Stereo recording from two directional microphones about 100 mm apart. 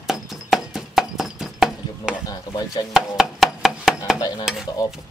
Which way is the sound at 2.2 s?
40° left (ahead or behind).